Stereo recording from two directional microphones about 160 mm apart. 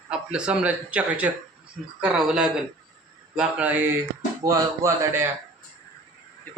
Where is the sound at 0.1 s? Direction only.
5° right (ahead or behind).